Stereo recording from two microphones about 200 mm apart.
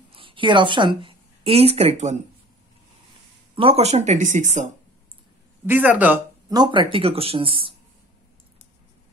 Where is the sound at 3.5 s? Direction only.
30° right (ahead or behind).